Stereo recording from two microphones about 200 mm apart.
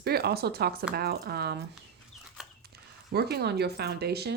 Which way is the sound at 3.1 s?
55° right (ahead or behind).